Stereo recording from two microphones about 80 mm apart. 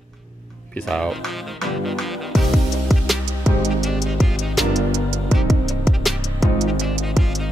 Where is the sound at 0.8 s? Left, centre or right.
Centre.